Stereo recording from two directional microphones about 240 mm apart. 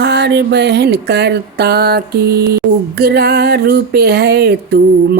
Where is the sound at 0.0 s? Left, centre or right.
Right.